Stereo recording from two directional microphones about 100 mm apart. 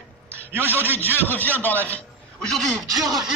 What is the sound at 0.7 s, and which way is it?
A man's voice, 20° left (ahead or behind).